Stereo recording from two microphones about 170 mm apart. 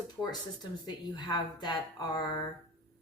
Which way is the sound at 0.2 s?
25° left (ahead or behind).